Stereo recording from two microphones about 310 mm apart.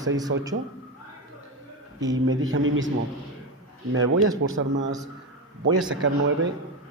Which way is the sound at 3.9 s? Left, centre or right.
Right.